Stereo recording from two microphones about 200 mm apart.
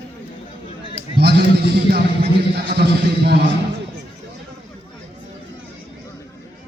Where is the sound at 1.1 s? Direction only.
55° right (ahead or behind).